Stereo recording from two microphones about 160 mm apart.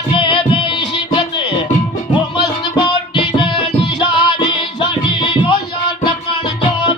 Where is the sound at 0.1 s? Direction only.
30° left (ahead or behind).